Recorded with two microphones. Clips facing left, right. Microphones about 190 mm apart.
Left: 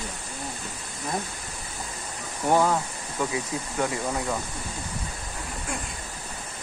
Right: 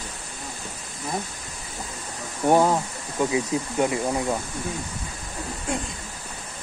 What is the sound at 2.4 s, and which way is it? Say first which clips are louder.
Speech: right 3 dB; 20° right (ahead or behind).